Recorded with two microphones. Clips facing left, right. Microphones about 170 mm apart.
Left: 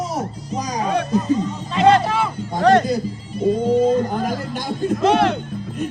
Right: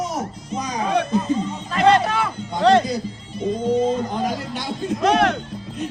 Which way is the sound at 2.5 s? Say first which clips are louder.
Left 1 dB; 50° left (ahead or behind).